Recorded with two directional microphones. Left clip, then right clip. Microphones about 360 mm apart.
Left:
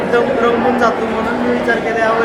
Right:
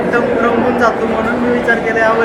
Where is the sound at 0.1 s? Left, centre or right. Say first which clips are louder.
Left 1 dB; centre.